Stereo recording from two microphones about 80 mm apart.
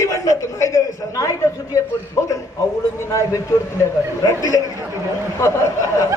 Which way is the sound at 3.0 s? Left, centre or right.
Left.